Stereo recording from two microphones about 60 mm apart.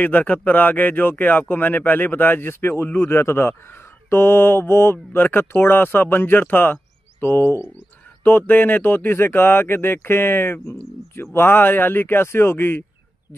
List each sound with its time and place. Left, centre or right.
0.0 s speech: left